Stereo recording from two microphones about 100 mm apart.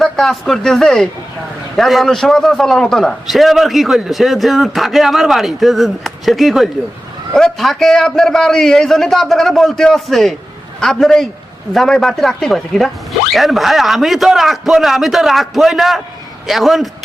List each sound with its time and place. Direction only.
0.0 s a man's voice: 5° left (ahead or behind)